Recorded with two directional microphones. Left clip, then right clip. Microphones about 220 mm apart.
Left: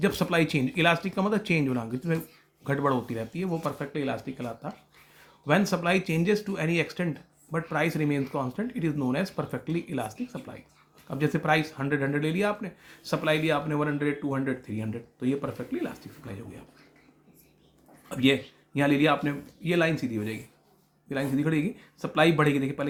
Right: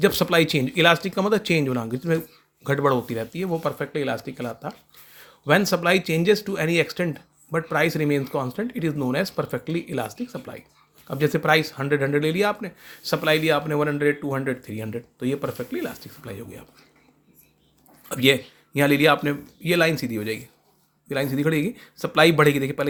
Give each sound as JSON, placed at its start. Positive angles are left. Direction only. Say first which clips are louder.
{"t": 0.0, "sound": "speech", "louder": "right 6 dB", "side_deg": -35}
{"t": 18.1, "sound": "speech", "louder": "right 5 dB", "side_deg": -40}